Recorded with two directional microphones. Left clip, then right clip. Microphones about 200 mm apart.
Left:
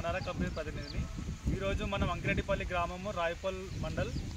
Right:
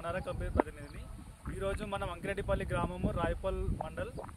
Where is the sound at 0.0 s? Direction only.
25° right (ahead or behind).